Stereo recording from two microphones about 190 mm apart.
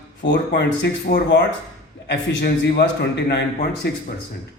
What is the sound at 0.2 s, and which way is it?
A man's voice, 65° left (ahead or behind).